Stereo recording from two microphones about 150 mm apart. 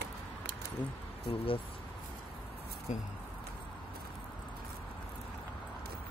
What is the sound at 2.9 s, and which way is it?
Speech, 55° left (ahead or behind).